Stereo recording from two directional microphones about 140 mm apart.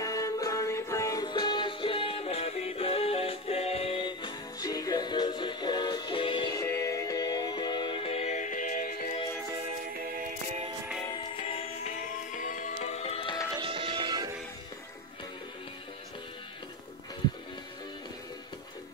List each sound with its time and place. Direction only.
0.0 s music: 25° left (ahead or behind)
1.3 s music: 35° left (ahead or behind)
6.5 s music: 20° left (ahead or behind); by 9.1 s 85° left
11.4 s music: 45° left (ahead or behind)
12.3 s music: 65° left (ahead or behind); by 13.3 s 45° left (ahead or behind)
13.6 s music: 40° right (ahead or behind)